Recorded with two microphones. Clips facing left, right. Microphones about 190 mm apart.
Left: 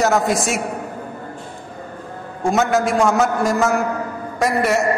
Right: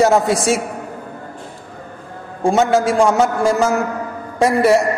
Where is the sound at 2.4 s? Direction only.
30° right (ahead or behind).